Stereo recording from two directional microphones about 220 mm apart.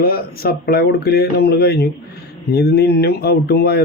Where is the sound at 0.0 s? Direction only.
45° left (ahead or behind).